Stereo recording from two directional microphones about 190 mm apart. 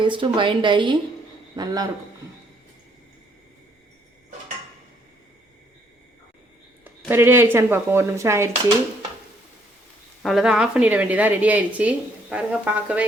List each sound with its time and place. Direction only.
0.0 s a woman's voice: 25° right (ahead or behind)
7.1 s speech: 10° right (ahead or behind)
10.2 s speech: centre (ahead or behind)